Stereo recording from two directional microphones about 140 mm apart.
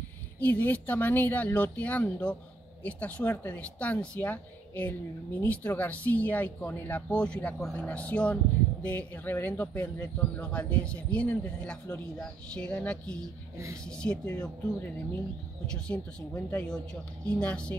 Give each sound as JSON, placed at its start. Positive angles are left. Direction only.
{"t": 0.4, "sound": "speech", "side_deg": 10}